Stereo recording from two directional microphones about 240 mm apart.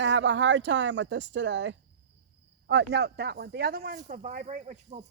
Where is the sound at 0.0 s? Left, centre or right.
Right.